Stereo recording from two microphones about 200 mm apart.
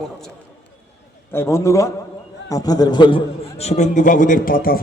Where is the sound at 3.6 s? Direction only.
35° left (ahead or behind).